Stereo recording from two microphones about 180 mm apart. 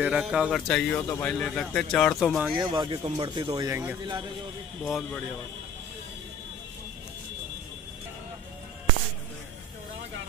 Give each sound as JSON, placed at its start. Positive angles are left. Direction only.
{"t": 0.0, "sound": "speech", "side_deg": -5}
{"t": 2.5, "sound": "speech", "side_deg": -25}
{"t": 4.8, "sound": "speech", "side_deg": 5}